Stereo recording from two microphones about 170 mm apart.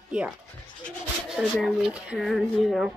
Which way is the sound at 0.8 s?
Centre (ahead or behind).